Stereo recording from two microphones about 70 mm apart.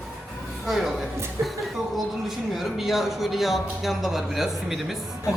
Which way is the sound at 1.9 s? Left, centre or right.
Centre.